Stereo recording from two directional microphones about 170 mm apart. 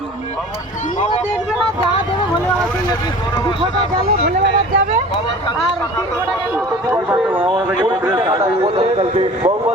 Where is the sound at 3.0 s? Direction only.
25° left (ahead or behind).